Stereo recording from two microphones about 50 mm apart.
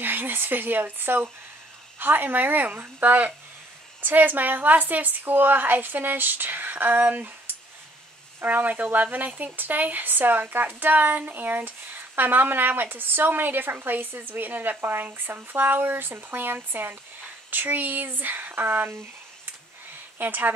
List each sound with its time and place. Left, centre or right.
0.0 s speech: right
20.2 s speech: right